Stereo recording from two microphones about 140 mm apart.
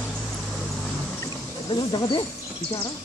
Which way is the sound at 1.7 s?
30° left (ahead or behind).